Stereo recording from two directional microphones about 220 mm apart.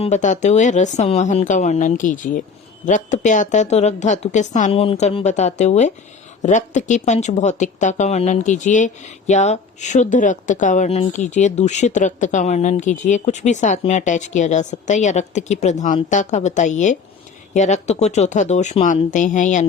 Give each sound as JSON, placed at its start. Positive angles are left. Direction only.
{"t": 0.0, "sound": "speech", "side_deg": 35}